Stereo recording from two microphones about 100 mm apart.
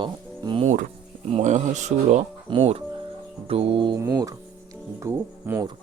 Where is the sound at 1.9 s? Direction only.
90° right.